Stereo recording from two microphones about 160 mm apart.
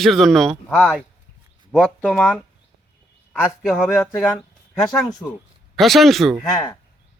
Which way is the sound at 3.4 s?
Centre (ahead or behind).